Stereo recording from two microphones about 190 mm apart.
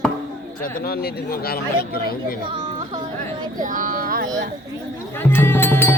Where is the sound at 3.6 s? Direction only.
45° right (ahead or behind).